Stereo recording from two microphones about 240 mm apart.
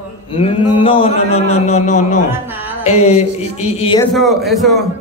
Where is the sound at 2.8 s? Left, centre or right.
Left.